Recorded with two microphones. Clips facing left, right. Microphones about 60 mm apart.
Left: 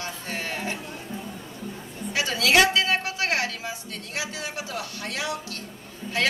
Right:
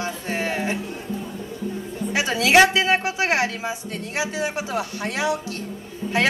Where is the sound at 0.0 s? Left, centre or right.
Right.